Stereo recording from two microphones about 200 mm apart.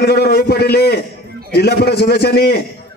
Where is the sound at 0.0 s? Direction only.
55° left (ahead or behind).